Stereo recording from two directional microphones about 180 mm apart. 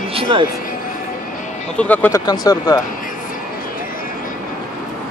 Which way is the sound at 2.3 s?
20° left (ahead or behind).